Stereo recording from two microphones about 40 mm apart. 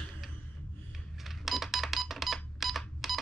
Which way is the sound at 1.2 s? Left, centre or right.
Centre.